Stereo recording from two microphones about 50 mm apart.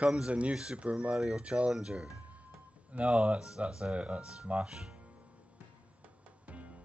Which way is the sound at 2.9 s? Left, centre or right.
Right.